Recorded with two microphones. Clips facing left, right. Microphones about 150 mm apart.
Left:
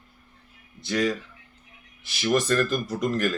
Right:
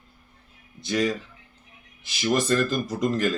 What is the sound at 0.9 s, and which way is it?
Speech, 15° right (ahead or behind).